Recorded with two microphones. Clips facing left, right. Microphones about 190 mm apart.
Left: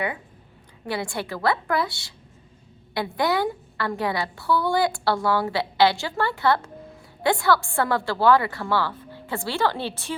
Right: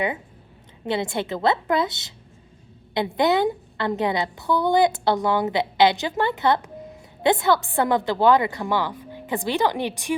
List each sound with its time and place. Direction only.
0.9 s a woman's voice: 20° right (ahead or behind)